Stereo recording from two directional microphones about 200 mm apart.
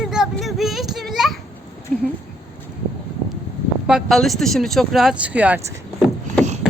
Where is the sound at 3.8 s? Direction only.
Centre (ahead or behind).